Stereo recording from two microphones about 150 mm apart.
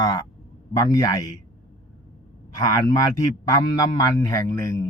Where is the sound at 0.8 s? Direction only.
25° left (ahead or behind).